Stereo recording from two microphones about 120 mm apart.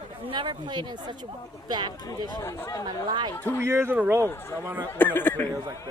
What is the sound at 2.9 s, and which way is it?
Speech, 35° right (ahead or behind).